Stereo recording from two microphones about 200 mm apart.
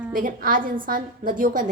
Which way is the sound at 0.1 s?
45° right (ahead or behind).